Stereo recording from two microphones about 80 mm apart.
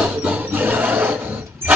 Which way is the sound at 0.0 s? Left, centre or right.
Centre.